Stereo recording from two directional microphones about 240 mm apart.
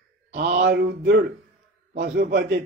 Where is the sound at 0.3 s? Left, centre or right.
Right.